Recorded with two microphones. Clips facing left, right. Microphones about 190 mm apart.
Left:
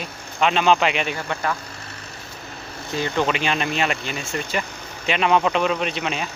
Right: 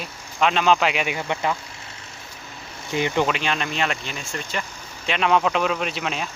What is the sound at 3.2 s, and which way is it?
Speech, centre (ahead or behind).